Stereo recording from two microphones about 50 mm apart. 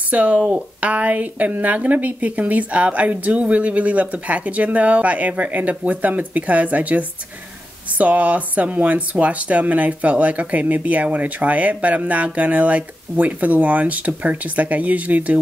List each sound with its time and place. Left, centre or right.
0.1 s speech: right